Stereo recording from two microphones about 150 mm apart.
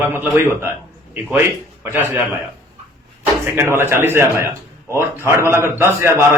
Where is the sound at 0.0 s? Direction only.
15° right (ahead or behind).